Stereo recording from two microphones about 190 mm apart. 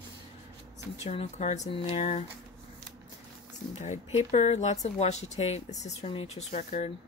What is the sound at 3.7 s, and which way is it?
Speech, 35° left (ahead or behind).